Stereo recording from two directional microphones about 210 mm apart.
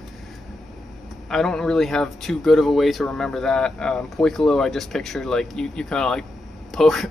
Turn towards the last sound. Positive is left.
turn(degrees=0)  # may be behind; listen again after turning